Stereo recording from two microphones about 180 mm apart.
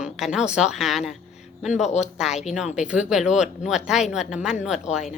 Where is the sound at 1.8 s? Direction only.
40° left (ahead or behind).